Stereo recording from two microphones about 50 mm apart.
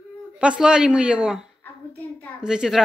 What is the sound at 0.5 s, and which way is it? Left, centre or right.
A child's voice, centre.